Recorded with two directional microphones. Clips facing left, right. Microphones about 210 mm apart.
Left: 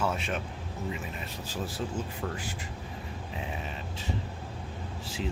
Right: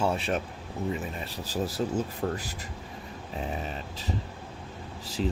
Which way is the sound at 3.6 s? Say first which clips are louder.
Right 2 dB; 35° right (ahead or behind).